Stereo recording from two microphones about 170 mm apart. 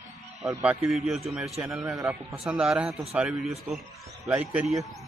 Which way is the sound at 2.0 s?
20° right (ahead or behind).